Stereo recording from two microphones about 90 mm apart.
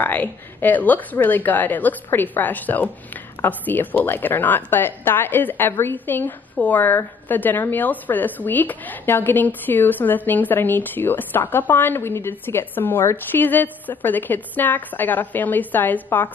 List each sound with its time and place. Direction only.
0.0 s a woman's voice: 20° left (ahead or behind)